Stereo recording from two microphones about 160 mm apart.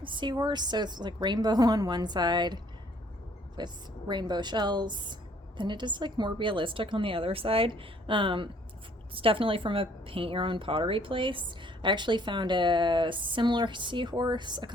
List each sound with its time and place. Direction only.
0.0 s a woman's voice: 30° right (ahead or behind)
3.6 s a woman's voice: 25° right (ahead or behind)